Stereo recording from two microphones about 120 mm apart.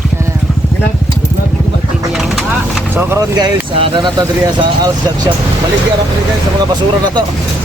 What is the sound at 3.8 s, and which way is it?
Speech, 40° right (ahead or behind).